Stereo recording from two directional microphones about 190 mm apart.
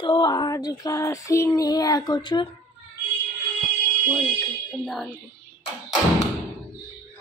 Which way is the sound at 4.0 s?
5° right (ahead or behind).